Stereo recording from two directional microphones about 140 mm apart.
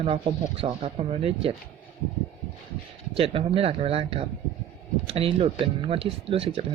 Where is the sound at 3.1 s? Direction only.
40° right (ahead or behind).